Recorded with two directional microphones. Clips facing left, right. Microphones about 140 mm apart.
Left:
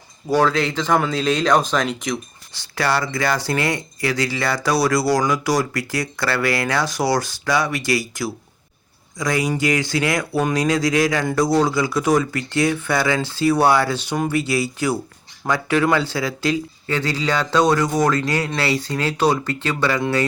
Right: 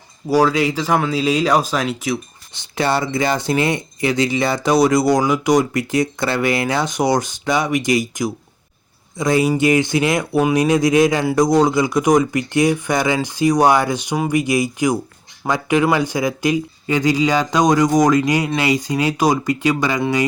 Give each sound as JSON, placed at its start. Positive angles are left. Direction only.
{"t": 0.3, "sound": "speech", "side_deg": -10}
{"t": 2.5, "sound": "speech", "side_deg": -20}